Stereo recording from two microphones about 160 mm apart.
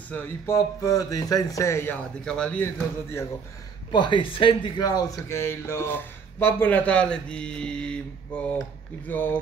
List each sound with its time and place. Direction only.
0.1 s speech: 20° left (ahead or behind)
2.2 s speech: 5° left (ahead or behind)
3.9 s speech: 30° left (ahead or behind); by 9.4 s 10° left (ahead or behind)